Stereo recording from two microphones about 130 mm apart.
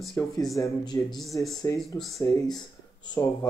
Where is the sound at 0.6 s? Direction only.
25° left (ahead or behind).